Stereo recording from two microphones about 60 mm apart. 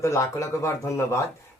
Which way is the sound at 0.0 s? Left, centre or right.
Left.